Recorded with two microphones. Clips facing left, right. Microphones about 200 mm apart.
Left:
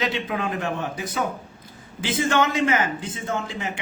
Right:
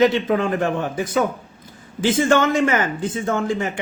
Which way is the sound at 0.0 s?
45° right (ahead or behind).